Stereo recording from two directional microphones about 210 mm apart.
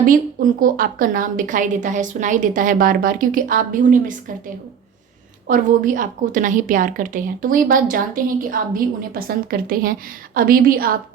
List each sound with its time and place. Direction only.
0.6 s a woman's voice: 40° right (ahead or behind)